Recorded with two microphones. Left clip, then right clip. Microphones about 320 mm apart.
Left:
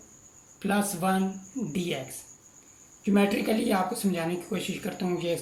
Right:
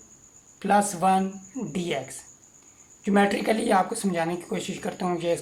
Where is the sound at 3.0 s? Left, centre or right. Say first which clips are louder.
Right 4 dB; right.